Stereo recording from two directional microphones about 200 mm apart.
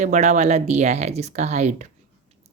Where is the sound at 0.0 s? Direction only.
35° right (ahead or behind).